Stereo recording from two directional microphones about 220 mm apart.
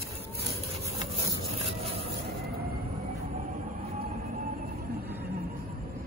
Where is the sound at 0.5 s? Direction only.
25° right (ahead or behind).